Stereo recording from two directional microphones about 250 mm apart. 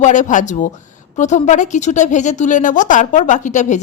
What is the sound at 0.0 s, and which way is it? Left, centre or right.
A woman's voice, left.